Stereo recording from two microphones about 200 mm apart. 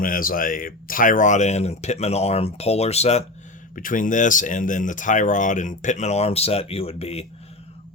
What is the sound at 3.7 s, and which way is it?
Speech, 40° left (ahead or behind).